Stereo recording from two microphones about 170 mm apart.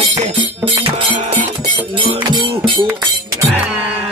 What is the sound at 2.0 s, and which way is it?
Livestock, 30° right (ahead or behind).